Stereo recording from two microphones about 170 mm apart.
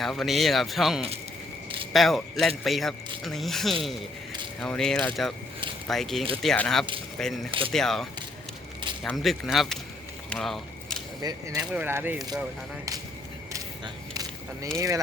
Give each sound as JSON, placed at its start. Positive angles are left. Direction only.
{"t": 0.0, "sound": "speech", "side_deg": 0}
{"t": 9.0, "sound": "speech", "side_deg": 0}
{"t": 10.2, "sound": "a sound", "side_deg": 0}
{"t": 11.2, "sound": "speech", "side_deg": -20}
{"t": 11.6, "sound": "speech", "side_deg": -10}
{"t": 13.5, "sound": "a sound", "side_deg": -20}
{"t": 14.8, "sound": "speech", "side_deg": -20}